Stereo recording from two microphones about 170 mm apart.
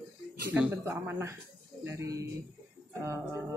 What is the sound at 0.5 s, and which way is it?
Speech, 10° right (ahead or behind).